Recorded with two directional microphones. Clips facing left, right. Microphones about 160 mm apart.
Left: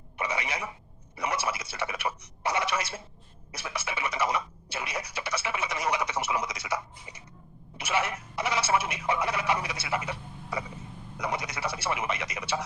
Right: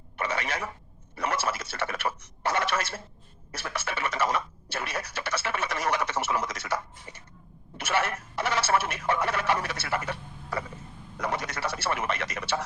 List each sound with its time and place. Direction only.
0.2 s speech: 15° left (ahead or behind)